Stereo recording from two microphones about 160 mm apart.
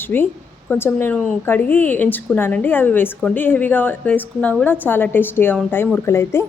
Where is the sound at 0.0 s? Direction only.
15° left (ahead or behind).